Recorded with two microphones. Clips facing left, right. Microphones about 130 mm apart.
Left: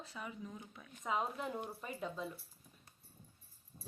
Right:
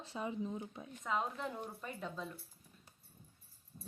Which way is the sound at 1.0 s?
5° left (ahead or behind).